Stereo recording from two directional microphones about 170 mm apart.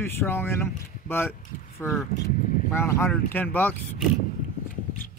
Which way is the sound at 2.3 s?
50° left (ahead or behind).